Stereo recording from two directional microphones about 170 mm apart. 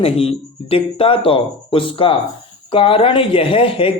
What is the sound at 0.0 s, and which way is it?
A man's voice, 35° left (ahead or behind).